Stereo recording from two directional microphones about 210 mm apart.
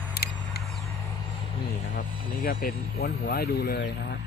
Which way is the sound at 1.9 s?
40° left (ahead or behind).